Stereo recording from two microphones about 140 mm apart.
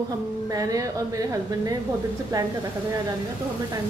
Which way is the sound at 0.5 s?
25° right (ahead or behind).